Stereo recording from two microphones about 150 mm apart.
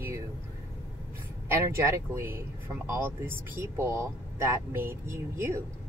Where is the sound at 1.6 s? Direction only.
20° right (ahead or behind).